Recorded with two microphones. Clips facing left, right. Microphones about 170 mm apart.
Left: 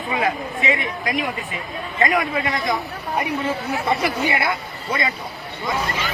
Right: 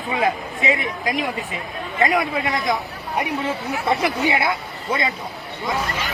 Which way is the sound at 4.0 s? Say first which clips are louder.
Right 1 dB; 20° right (ahead or behind).